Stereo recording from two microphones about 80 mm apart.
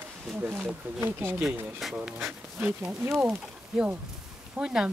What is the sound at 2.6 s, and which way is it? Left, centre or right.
Speech, right.